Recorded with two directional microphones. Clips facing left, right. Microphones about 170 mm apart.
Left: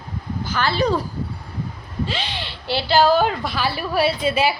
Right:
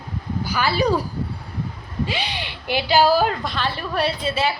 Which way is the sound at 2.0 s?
15° right (ahead or behind).